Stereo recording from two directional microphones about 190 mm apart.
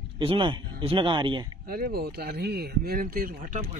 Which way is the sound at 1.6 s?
50° right (ahead or behind).